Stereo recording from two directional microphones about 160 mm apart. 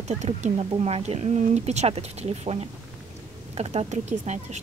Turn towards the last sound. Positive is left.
turn(degrees=-45)  # may be behind; listen again after turning